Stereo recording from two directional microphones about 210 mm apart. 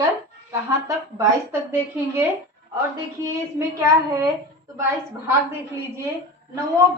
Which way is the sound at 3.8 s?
15° right (ahead or behind).